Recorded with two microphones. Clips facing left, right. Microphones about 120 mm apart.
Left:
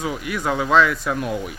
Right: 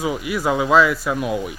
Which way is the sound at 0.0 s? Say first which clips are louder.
Right 3 dB; 5° right (ahead or behind).